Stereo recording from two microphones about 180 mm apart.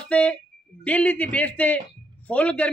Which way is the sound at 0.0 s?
5° left (ahead or behind).